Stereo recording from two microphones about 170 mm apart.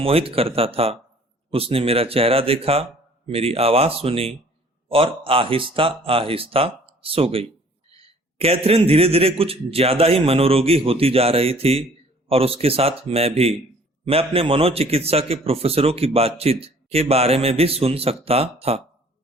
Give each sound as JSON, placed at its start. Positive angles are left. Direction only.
{"t": 0.0, "sound": "a man's voice", "side_deg": -35}